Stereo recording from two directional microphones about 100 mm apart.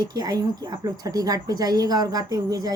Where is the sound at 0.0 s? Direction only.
40° right (ahead or behind).